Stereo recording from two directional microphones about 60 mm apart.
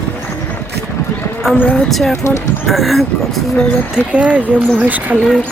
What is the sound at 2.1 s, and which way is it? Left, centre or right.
Speech, left.